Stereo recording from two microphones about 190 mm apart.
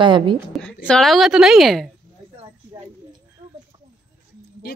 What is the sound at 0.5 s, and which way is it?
Speech, 5° left (ahead or behind).